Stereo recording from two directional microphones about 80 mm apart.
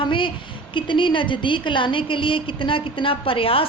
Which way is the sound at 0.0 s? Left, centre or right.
Left.